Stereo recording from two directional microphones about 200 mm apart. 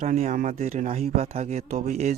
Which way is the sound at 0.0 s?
35° right (ahead or behind).